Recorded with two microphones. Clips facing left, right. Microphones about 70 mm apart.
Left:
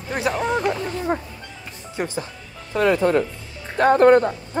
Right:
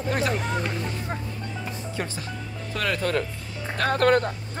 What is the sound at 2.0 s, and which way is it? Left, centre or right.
Speech, centre.